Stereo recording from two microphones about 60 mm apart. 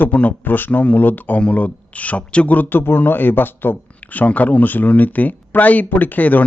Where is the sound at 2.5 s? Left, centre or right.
Left.